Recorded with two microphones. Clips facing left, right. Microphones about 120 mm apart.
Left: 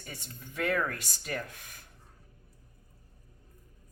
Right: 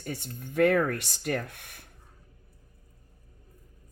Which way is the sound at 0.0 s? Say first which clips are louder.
Right 9 dB; 60° right (ahead or behind).